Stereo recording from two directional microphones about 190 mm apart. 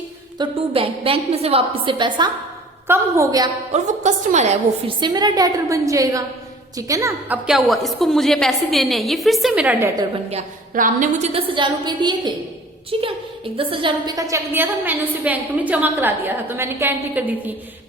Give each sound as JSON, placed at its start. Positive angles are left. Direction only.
{"t": 0.3, "sound": "a woman's voice", "side_deg": -30}
{"t": 3.7, "sound": "a woman's voice", "side_deg": -40}
{"t": 7.4, "sound": "a woman's voice", "side_deg": 0}
{"t": 10.0, "sound": "a woman's voice", "side_deg": -35}
{"t": 11.5, "sound": "a woman's voice", "side_deg": -25}